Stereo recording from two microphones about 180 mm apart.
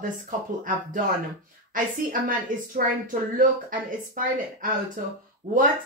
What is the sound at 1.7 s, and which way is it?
A woman's voice, 50° right (ahead or behind).